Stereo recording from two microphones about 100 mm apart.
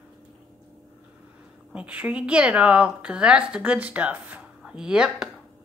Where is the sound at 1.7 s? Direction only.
10° right (ahead or behind).